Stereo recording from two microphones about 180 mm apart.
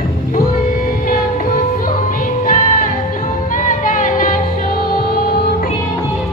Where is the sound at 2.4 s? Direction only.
50° left (ahead or behind).